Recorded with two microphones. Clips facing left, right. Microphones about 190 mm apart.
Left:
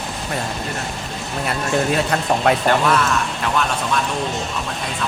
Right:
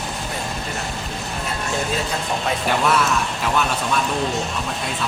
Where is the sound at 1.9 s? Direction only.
65° left (ahead or behind).